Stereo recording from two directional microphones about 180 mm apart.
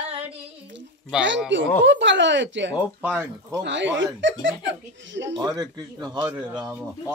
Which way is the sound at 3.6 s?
90° right.